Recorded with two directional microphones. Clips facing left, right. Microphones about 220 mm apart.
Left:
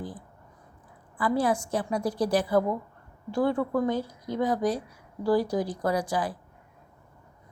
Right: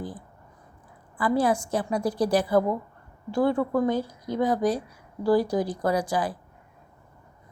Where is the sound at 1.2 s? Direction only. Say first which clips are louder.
Right 2 dB; 35° right (ahead or behind).